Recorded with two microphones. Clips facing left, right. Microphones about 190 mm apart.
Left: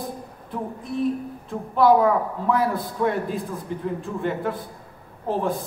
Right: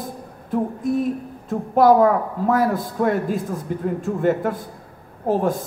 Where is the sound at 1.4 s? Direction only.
45° right (ahead or behind).